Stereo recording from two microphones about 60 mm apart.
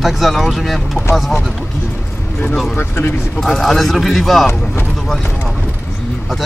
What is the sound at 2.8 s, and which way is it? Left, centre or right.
Speech, left.